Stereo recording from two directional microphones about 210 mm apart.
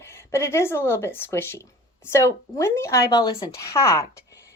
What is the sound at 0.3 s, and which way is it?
Speech, 10° left (ahead or behind).